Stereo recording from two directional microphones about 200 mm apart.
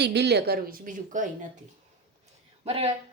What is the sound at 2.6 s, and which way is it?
Speech, 30° right (ahead or behind).